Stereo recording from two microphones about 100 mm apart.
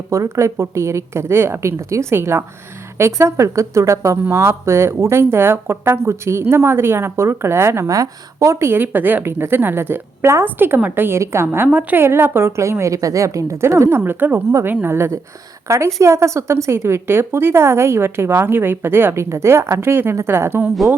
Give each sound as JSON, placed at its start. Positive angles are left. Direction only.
{"t": 0.1, "sound": "speech", "side_deg": -30}